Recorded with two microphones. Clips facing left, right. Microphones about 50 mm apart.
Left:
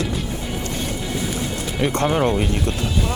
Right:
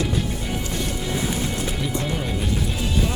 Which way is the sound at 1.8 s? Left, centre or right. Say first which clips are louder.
Left 13 dB; left.